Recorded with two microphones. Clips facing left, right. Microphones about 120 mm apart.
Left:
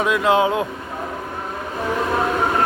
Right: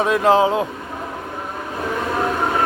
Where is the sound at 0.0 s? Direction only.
40° right (ahead or behind).